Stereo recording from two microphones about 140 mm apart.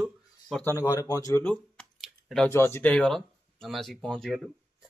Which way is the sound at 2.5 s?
20° left (ahead or behind).